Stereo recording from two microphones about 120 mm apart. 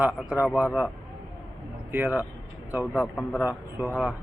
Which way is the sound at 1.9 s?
15° right (ahead or behind).